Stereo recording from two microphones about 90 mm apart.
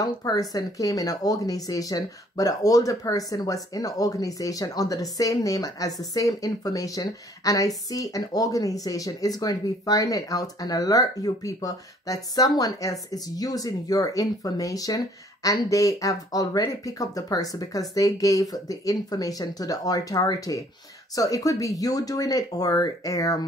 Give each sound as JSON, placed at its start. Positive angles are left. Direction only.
{"t": 0.0, "sound": "speech", "side_deg": 45}